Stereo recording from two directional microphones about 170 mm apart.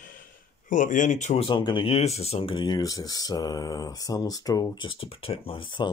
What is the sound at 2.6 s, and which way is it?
Speech, 20° left (ahead or behind).